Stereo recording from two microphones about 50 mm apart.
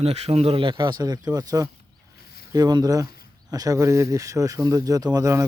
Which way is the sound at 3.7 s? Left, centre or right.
Right.